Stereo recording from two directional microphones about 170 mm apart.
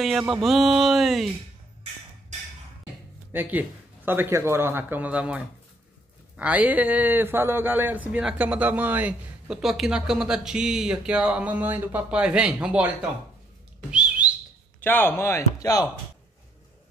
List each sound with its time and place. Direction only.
0.0 s speech: centre (ahead or behind)
3.3 s a man's voice: 10° right (ahead or behind)
13.8 s bird: 5° right (ahead or behind)
14.8 s speech: 10° left (ahead or behind)